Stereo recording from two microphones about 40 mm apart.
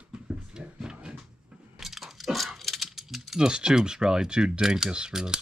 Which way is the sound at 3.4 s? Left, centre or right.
Centre.